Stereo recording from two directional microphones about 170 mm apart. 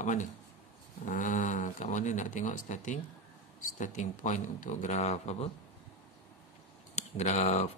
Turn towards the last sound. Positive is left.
turn(degrees=40)  # may be behind; listen again after turning